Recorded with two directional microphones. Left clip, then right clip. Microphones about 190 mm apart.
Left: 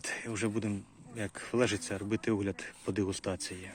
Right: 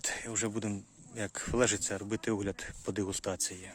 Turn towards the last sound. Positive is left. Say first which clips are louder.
# right 1 dB
turn(degrees=-10)  # may be behind; listen again after turning